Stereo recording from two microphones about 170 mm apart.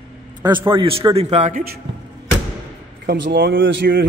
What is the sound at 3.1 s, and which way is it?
Speech, 70° right (ahead or behind).